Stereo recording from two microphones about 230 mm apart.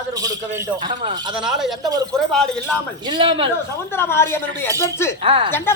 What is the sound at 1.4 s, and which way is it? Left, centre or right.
Speech, centre.